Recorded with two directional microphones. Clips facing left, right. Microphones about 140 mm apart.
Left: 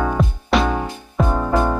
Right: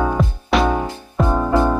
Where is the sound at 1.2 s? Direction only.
15° right (ahead or behind).